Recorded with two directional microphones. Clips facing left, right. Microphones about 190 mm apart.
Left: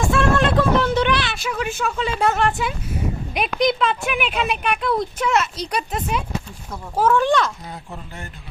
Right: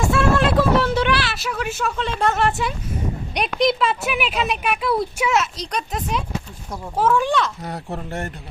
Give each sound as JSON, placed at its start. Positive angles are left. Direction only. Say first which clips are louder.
{"t": 0.1, "sound": "a sound", "louder": "left 1 dB", "side_deg": -5}
{"t": 3.3, "sound": "speech", "louder": "right 1 dB", "side_deg": 0}
{"t": 7.6, "sound": "speech", "louder": "right 6 dB", "side_deg": -70}